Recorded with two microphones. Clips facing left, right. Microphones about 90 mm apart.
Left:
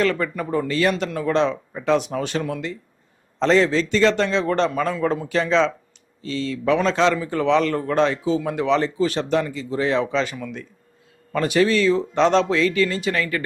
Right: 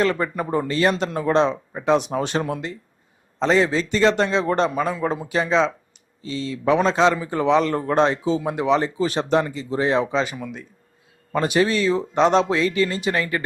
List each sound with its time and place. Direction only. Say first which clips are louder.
0.0 s a man's voice: even; 25° right (ahead or behind)
3.3 s a man's voice: left 1 dB; 10° right (ahead or behind)